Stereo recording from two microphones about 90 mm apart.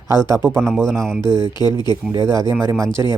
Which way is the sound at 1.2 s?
60° left (ahead or behind).